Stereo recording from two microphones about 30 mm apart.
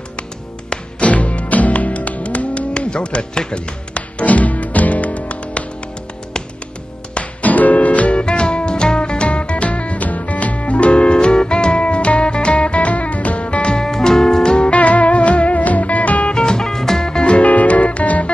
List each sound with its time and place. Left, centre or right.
0.9 s music: left
3.9 s music: left
7.4 s music: left
10.0 s music: left
13.8 s music: centre
14.7 s music: left
16.3 s music: left
17.0 s music: left
17.3 s music: left